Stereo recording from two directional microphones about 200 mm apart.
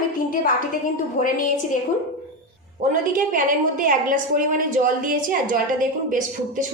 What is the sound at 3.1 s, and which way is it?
A woman's voice, 40° right (ahead or behind).